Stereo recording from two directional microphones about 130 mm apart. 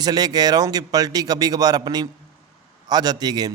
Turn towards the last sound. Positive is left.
turn(degrees=-30)  # may be behind; listen again after turning